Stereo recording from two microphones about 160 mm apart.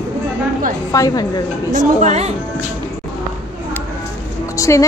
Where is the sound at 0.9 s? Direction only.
20° left (ahead or behind).